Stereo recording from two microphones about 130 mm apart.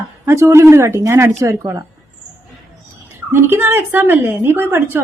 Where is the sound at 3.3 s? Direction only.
20° right (ahead or behind).